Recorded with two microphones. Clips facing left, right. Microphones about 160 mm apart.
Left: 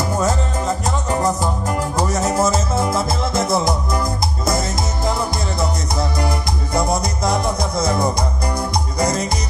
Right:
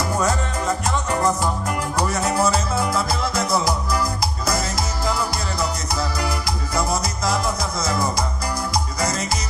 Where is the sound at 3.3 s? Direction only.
25° left (ahead or behind).